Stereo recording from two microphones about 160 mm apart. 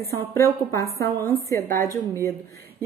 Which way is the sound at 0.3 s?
15° left (ahead or behind).